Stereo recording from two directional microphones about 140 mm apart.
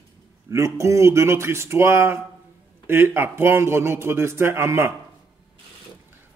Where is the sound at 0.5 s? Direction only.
20° right (ahead or behind).